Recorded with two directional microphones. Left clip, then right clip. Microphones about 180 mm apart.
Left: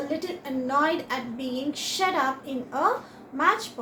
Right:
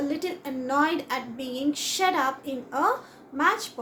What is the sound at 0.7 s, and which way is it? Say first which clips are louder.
A woman's voice: even; 35° right (ahead or behind).